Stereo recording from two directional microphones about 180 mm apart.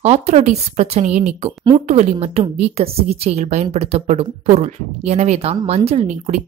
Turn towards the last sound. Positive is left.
turn(degrees=-35)  # may be behind; listen again after turning